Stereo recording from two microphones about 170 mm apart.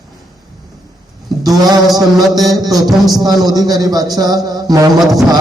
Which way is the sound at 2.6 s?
20° right (ahead or behind).